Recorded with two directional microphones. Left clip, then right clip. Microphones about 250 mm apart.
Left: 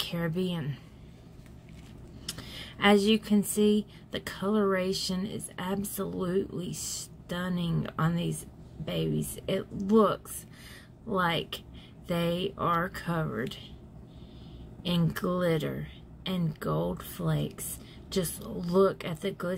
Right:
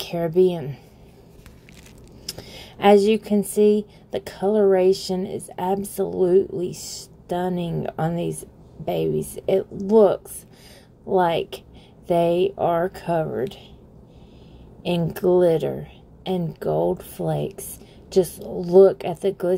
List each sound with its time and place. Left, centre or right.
0.0 s a woman's voice: centre
2.2 s a sound: centre
3.5 s a woman's voice: centre
14.8 s a woman's voice: centre